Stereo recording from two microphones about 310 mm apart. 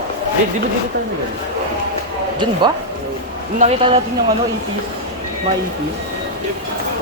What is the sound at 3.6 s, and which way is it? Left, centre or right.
Speech, centre.